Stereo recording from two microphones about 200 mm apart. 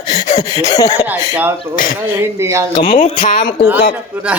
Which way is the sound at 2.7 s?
40° left (ahead or behind).